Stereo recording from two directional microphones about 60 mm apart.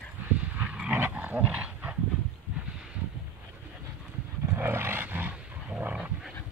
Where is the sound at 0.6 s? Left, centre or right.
Centre.